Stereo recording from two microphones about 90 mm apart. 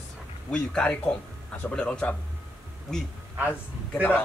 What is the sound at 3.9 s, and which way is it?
Speech, 20° left (ahead or behind).